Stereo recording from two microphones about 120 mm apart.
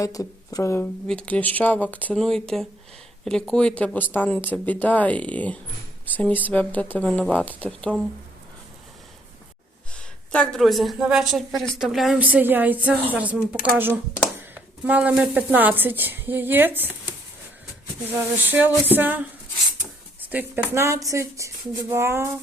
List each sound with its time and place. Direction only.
0.0 s a woman's voice: 30° left (ahead or behind)
1.0 s speech: 10° left (ahead or behind)
2.1 s a woman's voice: 5° left (ahead or behind)
9.9 s a woman's voice: 10° left (ahead or behind)
12.2 s a woman's voice: 15° right (ahead or behind)
18.1 s a woman's voice: 15° right (ahead or behind)
20.3 s a woman's voice: 15° right (ahead or behind)
20.7 s a sound: 25° right (ahead or behind)